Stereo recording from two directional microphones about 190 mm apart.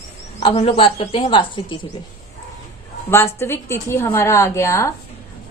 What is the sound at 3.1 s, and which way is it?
A woman's voice, 15° left (ahead or behind).